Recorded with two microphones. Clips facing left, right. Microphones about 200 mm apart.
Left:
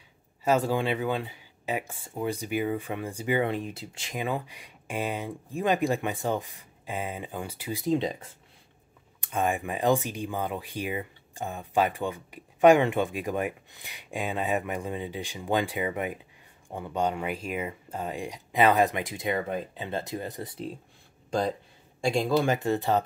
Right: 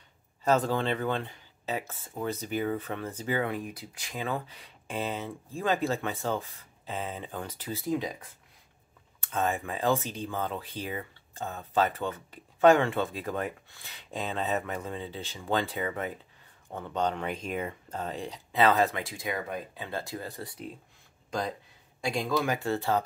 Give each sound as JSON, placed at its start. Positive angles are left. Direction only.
{"t": 0.4, "sound": "speech", "side_deg": 10}
{"t": 9.2, "sound": "a man's voice", "side_deg": 15}
{"t": 22.6, "sound": "a man's voice", "side_deg": 20}